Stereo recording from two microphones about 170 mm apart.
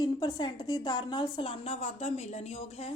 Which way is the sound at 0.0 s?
25° left (ahead or behind).